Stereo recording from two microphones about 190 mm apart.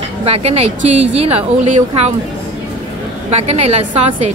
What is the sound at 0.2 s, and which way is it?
A woman's voice, 35° right (ahead or behind).